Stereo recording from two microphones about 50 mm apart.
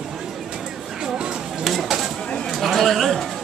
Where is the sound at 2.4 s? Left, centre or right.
Centre.